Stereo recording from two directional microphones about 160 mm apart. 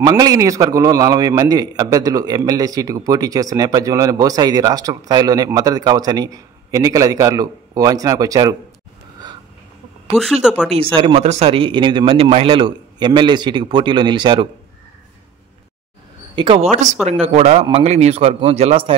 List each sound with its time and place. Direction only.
0.1 s a man's voice: 20° right (ahead or behind)
10.1 s speech: centre (ahead or behind)
10.7 s speech: 35° right (ahead or behind)
16.3 s speech: 30° right (ahead or behind)
17.0 s speech: 45° right (ahead or behind)